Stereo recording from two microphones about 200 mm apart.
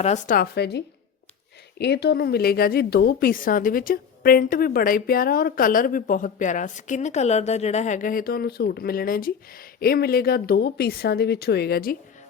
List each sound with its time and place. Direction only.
0.0 s a woman's voice: 40° left (ahead or behind)